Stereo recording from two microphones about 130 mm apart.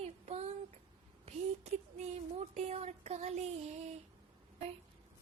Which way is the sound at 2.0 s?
55° right (ahead or behind).